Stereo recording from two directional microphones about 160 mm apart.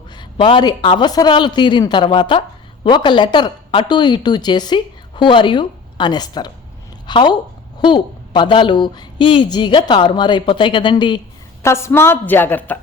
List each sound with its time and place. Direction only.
0.2 s a woman's voice: 30° left (ahead or behind)
11.6 s a woman's voice: 15° left (ahead or behind)